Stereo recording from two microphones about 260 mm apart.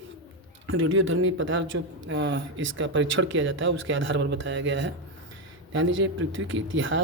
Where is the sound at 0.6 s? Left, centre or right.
Right.